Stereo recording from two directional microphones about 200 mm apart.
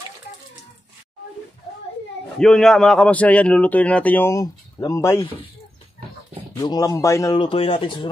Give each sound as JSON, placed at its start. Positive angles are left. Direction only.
{"t": 2.3, "sound": "a man's voice", "side_deg": 5}
{"t": 6.5, "sound": "speech", "side_deg": 20}